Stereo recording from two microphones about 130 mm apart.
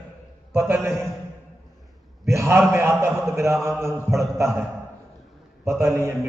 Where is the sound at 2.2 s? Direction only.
20° right (ahead or behind).